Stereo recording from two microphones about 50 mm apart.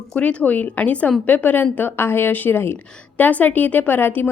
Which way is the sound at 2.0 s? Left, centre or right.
Left.